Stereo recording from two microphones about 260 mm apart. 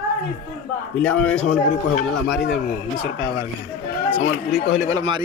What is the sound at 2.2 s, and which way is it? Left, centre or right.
Speech, left.